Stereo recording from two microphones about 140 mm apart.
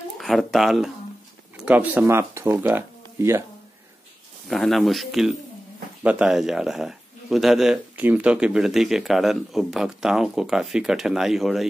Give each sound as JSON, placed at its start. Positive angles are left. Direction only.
{"t": 0.2, "sound": "speech", "side_deg": 0}
{"t": 4.5, "sound": "speech", "side_deg": 0}